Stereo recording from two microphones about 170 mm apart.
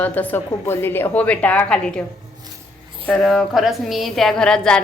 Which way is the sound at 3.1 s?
Centre (ahead or behind).